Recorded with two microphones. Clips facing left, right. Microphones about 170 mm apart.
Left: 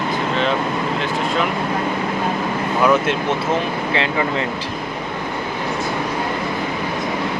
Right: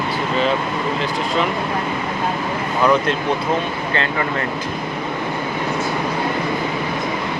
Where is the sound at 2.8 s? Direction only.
5° left (ahead or behind).